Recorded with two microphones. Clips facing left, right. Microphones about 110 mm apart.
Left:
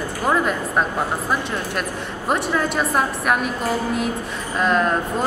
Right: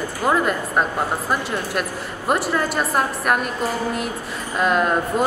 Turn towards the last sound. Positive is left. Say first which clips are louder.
# right 1 dB
turn(degrees=-5)  # may be behind; listen again after turning